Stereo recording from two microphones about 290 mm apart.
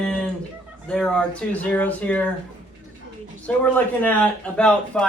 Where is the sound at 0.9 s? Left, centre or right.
Centre.